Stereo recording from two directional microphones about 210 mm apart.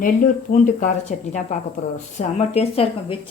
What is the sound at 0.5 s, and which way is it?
A woman's voice, 40° left (ahead or behind).